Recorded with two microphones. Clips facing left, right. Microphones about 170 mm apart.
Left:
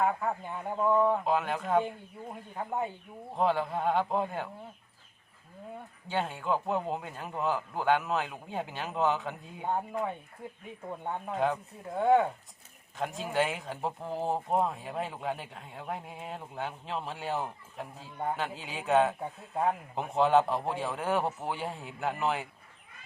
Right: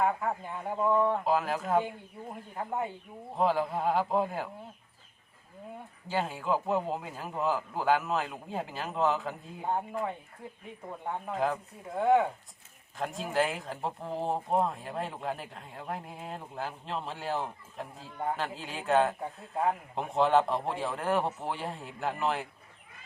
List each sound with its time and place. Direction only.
0.0 s speech: centre (ahead or behind)
6.1 s speech: centre (ahead or behind)
11.3 s speech: centre (ahead or behind)